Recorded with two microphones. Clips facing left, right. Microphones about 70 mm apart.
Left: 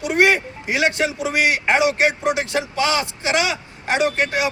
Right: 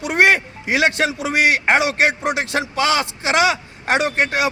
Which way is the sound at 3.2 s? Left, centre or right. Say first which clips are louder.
Right 5 dB; right.